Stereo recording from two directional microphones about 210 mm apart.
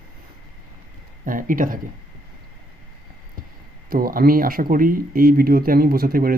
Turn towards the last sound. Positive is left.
turn(degrees=-45)  # may be behind; listen again after turning